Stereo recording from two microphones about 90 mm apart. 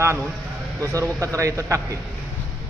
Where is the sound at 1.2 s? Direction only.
35° right (ahead or behind).